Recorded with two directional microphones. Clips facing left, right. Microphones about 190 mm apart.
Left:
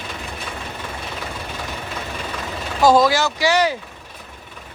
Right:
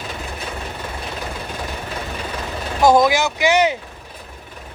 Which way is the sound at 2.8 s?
20° right (ahead or behind).